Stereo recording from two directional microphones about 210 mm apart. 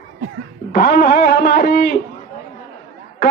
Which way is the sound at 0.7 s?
45° left (ahead or behind).